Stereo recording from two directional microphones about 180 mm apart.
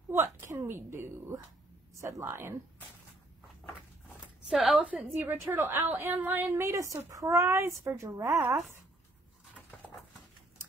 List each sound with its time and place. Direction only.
0.1 s a woman's voice: 15° right (ahead or behind)
4.5 s a woman's voice: centre (ahead or behind)